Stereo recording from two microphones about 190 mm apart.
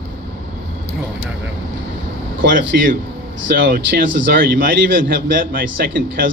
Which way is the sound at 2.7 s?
60° right (ahead or behind).